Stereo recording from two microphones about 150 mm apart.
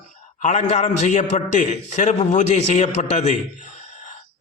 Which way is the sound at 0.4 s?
50° left (ahead or behind).